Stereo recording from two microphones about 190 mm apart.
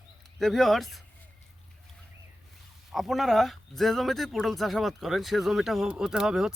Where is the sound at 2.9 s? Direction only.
Centre (ahead or behind).